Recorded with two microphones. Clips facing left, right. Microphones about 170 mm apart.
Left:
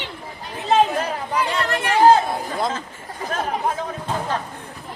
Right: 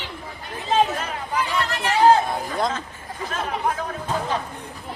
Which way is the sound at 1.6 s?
55° left (ahead or behind).